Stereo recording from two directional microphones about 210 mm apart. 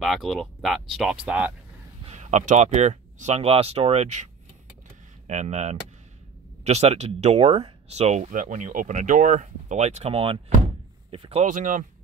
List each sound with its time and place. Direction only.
0.0 s speech: centre (ahead or behind)
2.0 s speech: 35° right (ahead or behind)